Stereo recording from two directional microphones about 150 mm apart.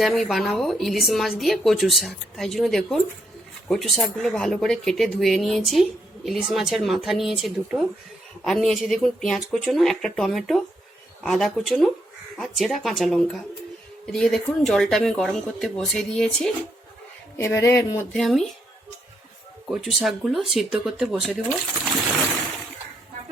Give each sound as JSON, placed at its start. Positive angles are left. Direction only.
{"t": 0.0, "sound": "a woman's voice", "side_deg": 0}
{"t": 17.3, "sound": "a sound", "side_deg": 20}
{"t": 18.1, "sound": "a woman's voice", "side_deg": 0}
{"t": 19.7, "sound": "a woman's voice", "side_deg": -5}